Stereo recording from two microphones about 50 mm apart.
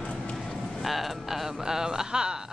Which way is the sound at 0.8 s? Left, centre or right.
Centre.